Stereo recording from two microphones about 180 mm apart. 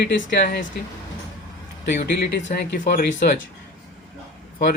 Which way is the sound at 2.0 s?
65° left (ahead or behind).